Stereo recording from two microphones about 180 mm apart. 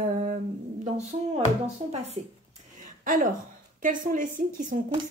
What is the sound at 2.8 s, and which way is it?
A woman's voice, 50° right (ahead or behind).